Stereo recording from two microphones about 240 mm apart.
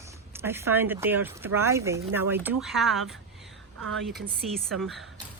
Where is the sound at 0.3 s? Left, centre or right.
Centre.